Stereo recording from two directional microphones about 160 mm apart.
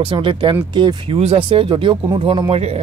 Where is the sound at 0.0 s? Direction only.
35° right (ahead or behind).